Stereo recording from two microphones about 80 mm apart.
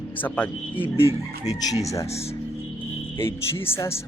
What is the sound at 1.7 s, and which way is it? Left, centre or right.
Speech, left.